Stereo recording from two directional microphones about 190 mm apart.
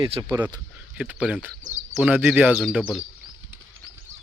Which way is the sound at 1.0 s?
5° right (ahead or behind).